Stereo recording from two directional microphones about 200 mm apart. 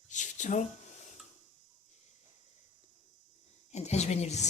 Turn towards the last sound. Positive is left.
turn(degrees=35)  # may be behind; listen again after turning